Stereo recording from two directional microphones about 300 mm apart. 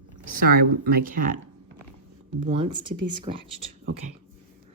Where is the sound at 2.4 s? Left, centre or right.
Centre.